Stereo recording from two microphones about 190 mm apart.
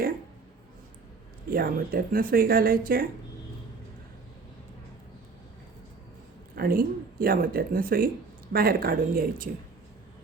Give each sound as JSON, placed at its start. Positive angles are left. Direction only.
{"t": 1.5, "sound": "speech", "side_deg": -50}
{"t": 6.6, "sound": "speech", "side_deg": -50}